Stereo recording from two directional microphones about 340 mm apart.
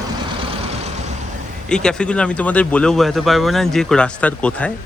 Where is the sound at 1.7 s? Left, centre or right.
Centre.